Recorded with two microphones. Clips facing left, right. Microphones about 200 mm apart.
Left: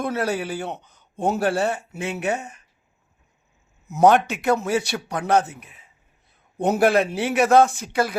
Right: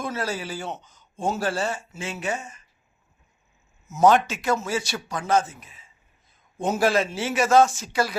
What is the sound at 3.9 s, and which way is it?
A man's voice, 60° left (ahead or behind).